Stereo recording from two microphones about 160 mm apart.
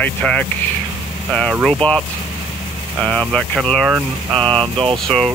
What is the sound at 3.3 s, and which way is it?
Speech, 5° left (ahead or behind).